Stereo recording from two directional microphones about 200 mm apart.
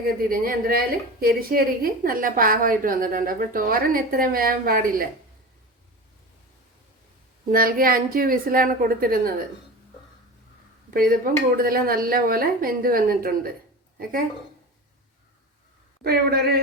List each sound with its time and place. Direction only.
0.0 s a woman's voice: 45° right (ahead or behind)
7.5 s a woman's voice: 45° right (ahead or behind)
10.9 s a woman's voice: 45° right (ahead or behind)
16.0 s a woman's voice: 50° right (ahead or behind)